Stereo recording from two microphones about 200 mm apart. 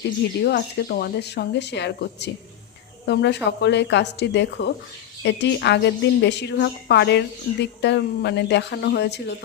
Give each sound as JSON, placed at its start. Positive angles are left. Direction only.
{"t": 0.4, "sound": "a woman's voice", "side_deg": 55}